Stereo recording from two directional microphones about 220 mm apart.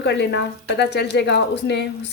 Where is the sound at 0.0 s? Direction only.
50° left (ahead or behind).